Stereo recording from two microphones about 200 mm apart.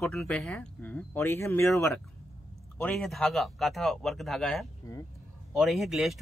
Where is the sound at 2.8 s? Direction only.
5° left (ahead or behind).